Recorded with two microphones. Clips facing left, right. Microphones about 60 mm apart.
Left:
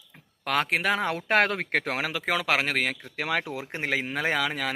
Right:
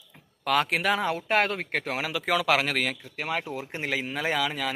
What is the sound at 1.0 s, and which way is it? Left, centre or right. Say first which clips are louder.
Speech: left 1 dB; left.